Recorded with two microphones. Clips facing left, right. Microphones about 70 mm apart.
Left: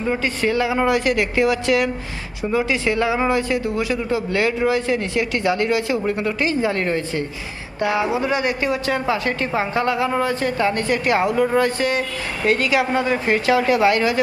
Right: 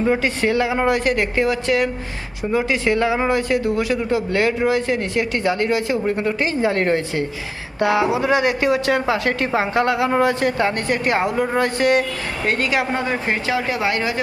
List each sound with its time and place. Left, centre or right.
0.0 s speech: right
0.8 s a woman's voice: right
7.8 s speech: right
12.5 s a woman's voice: right